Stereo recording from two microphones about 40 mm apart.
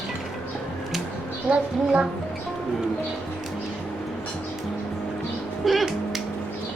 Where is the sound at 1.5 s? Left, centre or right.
Right.